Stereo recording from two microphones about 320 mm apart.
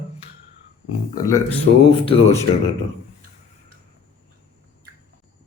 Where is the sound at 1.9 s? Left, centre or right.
Centre.